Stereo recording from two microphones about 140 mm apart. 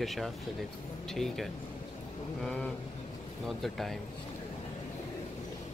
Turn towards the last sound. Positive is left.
turn(degrees=0)  # may be behind; listen again after turning